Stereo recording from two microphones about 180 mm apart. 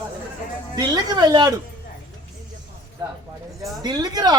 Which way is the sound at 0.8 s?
25° right (ahead or behind).